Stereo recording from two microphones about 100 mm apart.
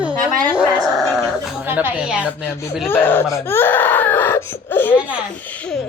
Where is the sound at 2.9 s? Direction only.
20° left (ahead or behind).